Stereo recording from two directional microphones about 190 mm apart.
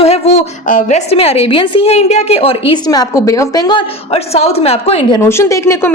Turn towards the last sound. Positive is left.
turn(degrees=15)  # may be behind; listen again after turning